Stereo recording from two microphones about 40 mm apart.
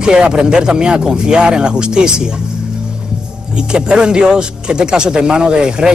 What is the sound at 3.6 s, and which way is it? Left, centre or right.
Speech, right.